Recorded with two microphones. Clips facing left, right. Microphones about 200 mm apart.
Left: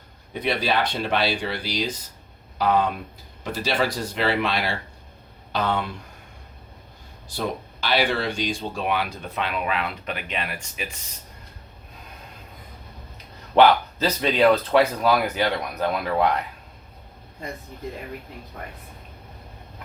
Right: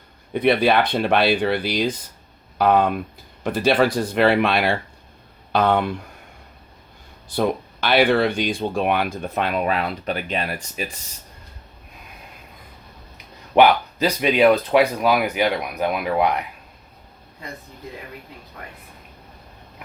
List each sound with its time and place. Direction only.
0.3 s speech: 55° right (ahead or behind)
7.3 s speech: 55° right (ahead or behind); by 10.8 s 35° right (ahead or behind)
13.5 s speech: 15° right (ahead or behind)